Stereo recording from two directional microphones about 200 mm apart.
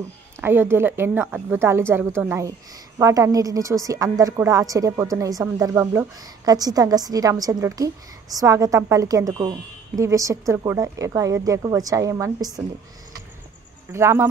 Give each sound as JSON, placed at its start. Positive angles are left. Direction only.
{"t": 0.4, "sound": "a woman's voice", "side_deg": -10}
{"t": 13.9, "sound": "a woman's voice", "side_deg": -15}